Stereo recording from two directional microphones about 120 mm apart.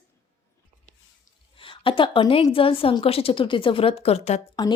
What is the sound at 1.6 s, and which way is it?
A woman's voice, 45° left (ahead or behind).